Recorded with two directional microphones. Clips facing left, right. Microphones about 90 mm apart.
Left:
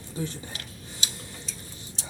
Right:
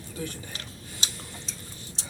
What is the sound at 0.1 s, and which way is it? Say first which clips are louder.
Speech: left 3 dB; 25° left (ahead or behind).